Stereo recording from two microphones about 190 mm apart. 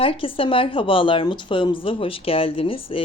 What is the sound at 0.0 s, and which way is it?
Speech, 30° left (ahead or behind).